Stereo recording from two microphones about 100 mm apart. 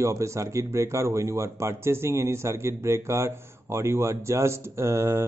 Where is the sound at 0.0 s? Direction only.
30° right (ahead or behind).